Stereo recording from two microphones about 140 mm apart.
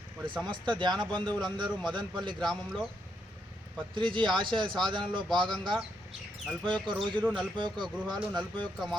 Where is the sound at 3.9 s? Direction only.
35° right (ahead or behind).